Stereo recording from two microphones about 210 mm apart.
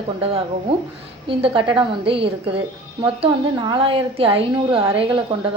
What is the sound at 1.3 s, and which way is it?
A woman's voice, 25° right (ahead or behind).